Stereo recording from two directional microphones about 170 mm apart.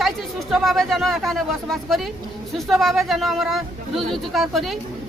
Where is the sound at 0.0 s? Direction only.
Centre (ahead or behind).